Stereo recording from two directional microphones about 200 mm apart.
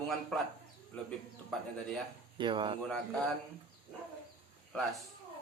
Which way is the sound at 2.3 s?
25° right (ahead or behind).